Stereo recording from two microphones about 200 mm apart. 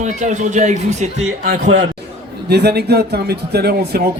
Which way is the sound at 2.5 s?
55° right (ahead or behind).